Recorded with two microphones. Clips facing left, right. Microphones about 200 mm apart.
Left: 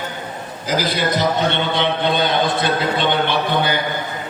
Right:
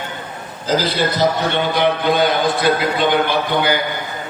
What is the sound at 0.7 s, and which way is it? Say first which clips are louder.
A man's voice: right 2 dB; 15° left (ahead or behind).